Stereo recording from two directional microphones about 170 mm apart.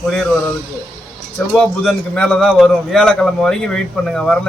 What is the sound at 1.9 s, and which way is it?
A man's voice, 5° left (ahead or behind).